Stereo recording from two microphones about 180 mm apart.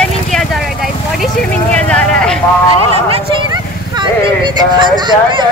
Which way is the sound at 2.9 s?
25° right (ahead or behind).